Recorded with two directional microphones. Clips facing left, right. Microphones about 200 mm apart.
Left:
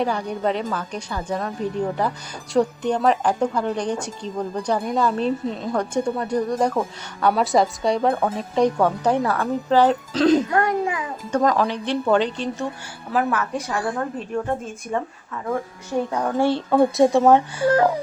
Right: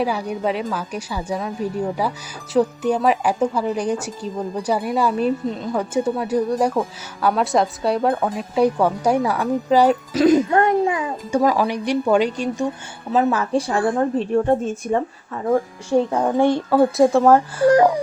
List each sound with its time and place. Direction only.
0.0 s a woman's voice: 5° right (ahead or behind)
10.5 s a child's voice: 25° right (ahead or behind)
11.3 s a woman's voice: 10° right (ahead or behind)
13.1 s a woman's voice: 25° right (ahead or behind)
16.4 s a woman's voice: 15° right (ahead or behind)
16.6 s speech: 5° right (ahead or behind)